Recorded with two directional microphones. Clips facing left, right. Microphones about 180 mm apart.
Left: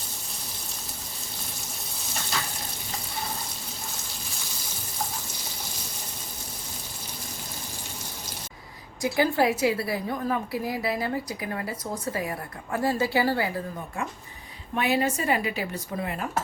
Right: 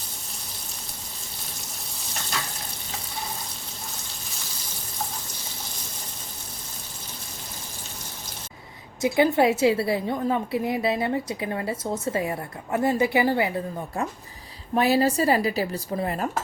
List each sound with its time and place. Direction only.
9.0 s a woman's voice: 20° right (ahead or behind)
14.8 s speech: 35° right (ahead or behind)